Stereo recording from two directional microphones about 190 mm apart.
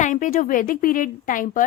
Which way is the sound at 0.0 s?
45° left (ahead or behind).